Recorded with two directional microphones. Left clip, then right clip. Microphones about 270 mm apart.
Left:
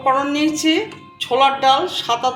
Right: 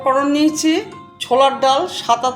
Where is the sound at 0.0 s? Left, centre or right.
Right.